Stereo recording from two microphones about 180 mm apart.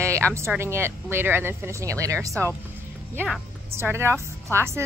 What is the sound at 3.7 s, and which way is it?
Speech, 15° right (ahead or behind).